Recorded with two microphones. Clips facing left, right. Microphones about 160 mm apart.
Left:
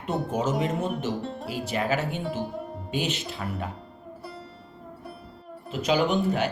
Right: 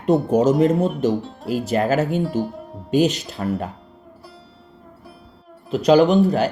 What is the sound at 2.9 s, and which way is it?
Speech, 40° right (ahead or behind).